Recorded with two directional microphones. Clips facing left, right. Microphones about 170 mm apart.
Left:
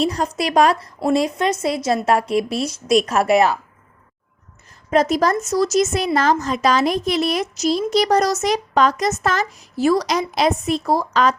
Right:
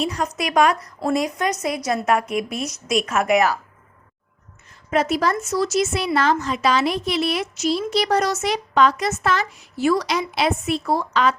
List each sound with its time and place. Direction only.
0.0 s speech: 35° left (ahead or behind)
4.9 s speech: 35° left (ahead or behind)